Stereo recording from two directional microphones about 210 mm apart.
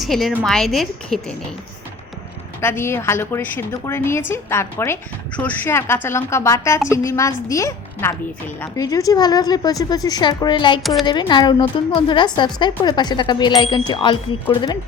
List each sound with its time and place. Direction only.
0.0 s a woman's voice: centre (ahead or behind)
2.6 s a woman's voice: 10° left (ahead or behind)